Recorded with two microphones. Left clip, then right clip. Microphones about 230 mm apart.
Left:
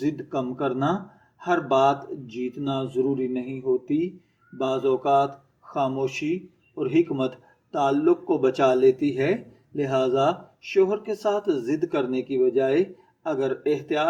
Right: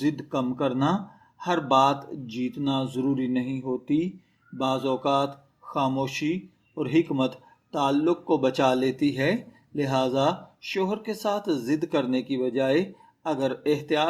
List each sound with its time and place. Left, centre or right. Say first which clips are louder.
0.0 s a man's voice: even; right